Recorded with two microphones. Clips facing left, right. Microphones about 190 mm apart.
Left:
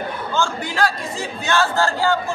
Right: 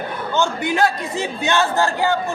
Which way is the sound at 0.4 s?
20° right (ahead or behind).